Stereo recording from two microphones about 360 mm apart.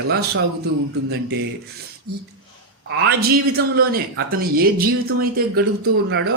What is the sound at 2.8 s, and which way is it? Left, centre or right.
Speech, right.